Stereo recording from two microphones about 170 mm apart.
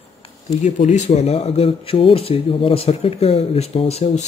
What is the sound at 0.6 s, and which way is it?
Speech, 45° left (ahead or behind).